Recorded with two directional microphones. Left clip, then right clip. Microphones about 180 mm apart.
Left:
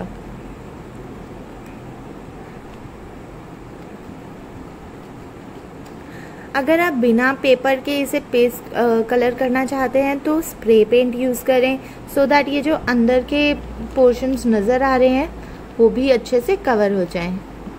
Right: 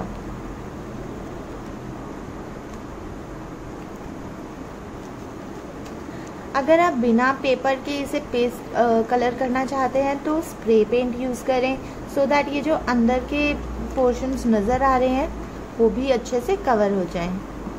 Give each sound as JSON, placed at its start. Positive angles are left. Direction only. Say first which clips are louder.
{"t": 6.5, "sound": "a woman's voice", "louder": "left 1 dB", "side_deg": 15}